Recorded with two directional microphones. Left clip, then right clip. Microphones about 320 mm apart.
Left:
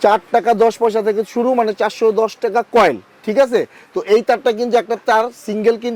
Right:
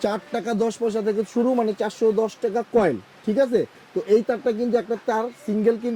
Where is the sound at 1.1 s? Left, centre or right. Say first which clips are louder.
Left 6 dB; centre.